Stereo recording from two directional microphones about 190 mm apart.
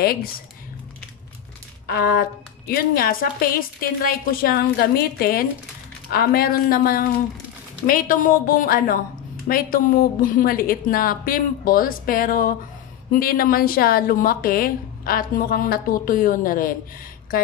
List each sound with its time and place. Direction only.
0.0 s a woman's voice: 55° left (ahead or behind)
1.9 s a woman's voice: 50° left (ahead or behind)